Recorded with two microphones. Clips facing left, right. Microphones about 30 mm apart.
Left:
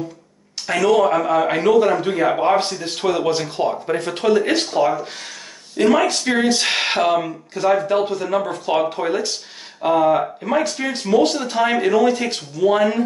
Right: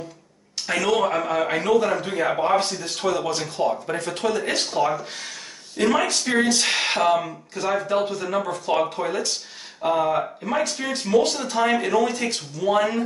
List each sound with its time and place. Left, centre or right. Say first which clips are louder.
0.7 s speech: left 6 dB; centre
2.8 s speech: left 4 dB; left